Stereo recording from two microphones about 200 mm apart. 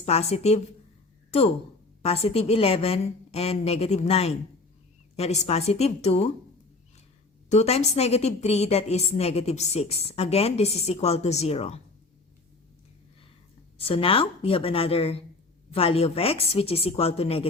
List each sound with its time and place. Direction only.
0.0 s a woman's voice: 30° left (ahead or behind)
7.5 s a woman's voice: 35° left (ahead or behind)
13.7 s a woman's voice: 25° left (ahead or behind)